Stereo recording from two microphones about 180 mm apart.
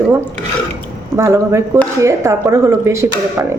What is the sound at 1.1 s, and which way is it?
A woman's voice, 15° right (ahead or behind).